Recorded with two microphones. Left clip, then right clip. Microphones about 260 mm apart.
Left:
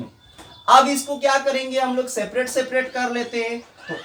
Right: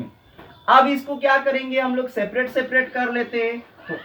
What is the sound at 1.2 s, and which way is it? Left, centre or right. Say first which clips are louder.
Speech: right 1 dB; left.